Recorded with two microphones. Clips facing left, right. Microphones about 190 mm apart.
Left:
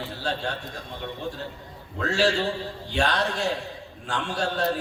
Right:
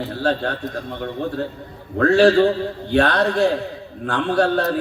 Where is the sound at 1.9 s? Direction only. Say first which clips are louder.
Right 11 dB; 55° right (ahead or behind).